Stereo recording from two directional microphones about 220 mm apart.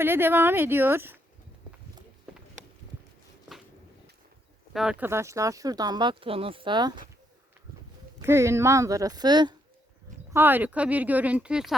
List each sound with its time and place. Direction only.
0.0 s speech: 10° right (ahead or behind)
2.3 s a sound: 5° right (ahead or behind)
4.7 s speech: 5° right (ahead or behind); by 7.0 s 20° right (ahead or behind)
8.2 s speech: 10° right (ahead or behind)
10.3 s speech: 10° right (ahead or behind)